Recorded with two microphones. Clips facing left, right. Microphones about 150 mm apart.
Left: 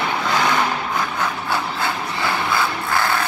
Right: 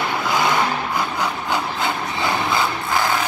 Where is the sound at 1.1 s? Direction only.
15° right (ahead or behind).